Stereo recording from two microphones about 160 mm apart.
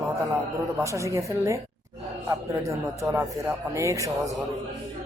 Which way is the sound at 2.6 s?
20° right (ahead or behind).